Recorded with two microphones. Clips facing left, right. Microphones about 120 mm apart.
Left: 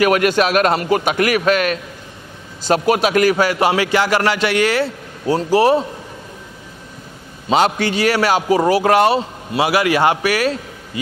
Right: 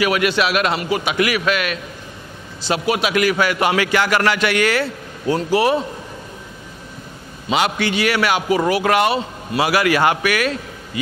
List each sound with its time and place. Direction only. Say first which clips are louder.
0.0 s a man's voice: left 3 dB; 45° left (ahead or behind)
7.4 s a man's voice: left 3 dB; 35° left (ahead or behind)
9.6 s a man's voice: left 1 dB; 25° left (ahead or behind)